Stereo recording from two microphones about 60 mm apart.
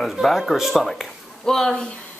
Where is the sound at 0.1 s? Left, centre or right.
Centre.